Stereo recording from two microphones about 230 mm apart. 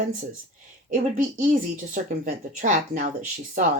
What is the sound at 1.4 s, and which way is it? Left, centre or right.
Speech, right.